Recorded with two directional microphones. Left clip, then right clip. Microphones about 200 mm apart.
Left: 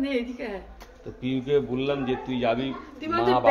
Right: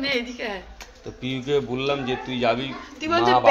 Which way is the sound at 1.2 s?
30° right (ahead or behind).